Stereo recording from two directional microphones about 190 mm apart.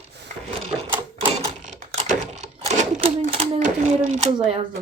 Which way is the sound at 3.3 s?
35° right (ahead or behind).